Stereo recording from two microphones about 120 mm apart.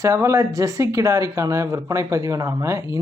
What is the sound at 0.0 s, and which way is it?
Speech, 25° right (ahead or behind).